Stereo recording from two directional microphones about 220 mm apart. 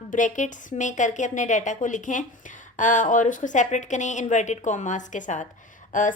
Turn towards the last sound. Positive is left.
turn(degrees=35)  # may be behind; listen again after turning